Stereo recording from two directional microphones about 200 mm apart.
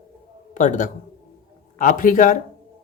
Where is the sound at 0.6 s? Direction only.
40° left (ahead or behind).